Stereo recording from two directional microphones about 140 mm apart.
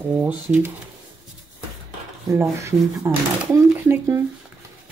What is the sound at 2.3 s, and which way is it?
Speech, 20° right (ahead or behind).